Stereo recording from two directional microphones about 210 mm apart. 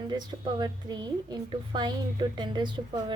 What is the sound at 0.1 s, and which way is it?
A woman's voice, 20° right (ahead or behind).